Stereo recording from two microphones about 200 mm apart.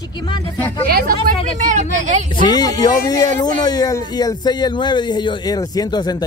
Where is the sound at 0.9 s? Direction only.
50° right (ahead or behind).